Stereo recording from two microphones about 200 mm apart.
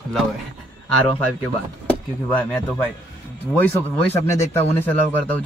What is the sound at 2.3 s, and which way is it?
A man's voice, 10° left (ahead or behind).